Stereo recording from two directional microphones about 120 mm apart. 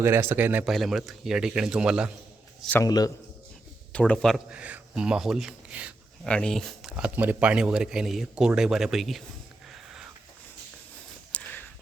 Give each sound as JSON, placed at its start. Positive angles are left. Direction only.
{"t": 0.0, "sound": "a man's voice", "side_deg": -20}
{"t": 0.6, "sound": "speech", "side_deg": 0}
{"t": 2.8, "sound": "a man's voice", "side_deg": 30}
{"t": 3.9, "sound": "speech", "side_deg": 10}
{"t": 4.5, "sound": "speech", "side_deg": -10}
{"t": 6.2, "sound": "speech", "side_deg": 5}
{"t": 6.9, "sound": "speech", "side_deg": -15}
{"t": 9.7, "sound": "a sound", "side_deg": -5}
{"t": 11.3, "sound": "a sound", "side_deg": 10}